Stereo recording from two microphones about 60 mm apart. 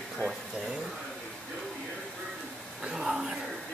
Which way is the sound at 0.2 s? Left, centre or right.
Left.